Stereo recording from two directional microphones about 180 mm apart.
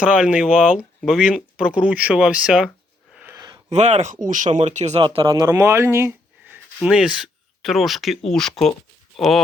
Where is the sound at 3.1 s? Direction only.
10° right (ahead or behind).